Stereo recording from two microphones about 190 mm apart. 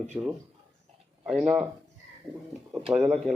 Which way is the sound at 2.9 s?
5° right (ahead or behind).